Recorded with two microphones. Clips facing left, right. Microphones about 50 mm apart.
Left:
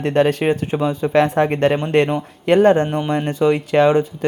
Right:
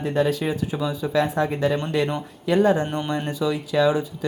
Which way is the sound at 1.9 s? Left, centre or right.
Left.